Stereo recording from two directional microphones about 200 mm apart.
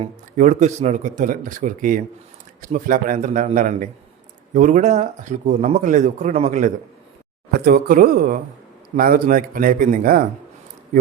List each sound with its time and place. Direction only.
0.0 s speech: 35° right (ahead or behind)
7.6 s speech: 45° right (ahead or behind)